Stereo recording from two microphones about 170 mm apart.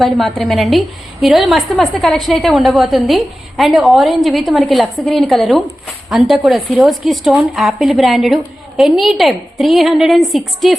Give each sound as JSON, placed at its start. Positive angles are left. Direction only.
{"t": 0.0, "sound": "a woman's voice", "side_deg": 0}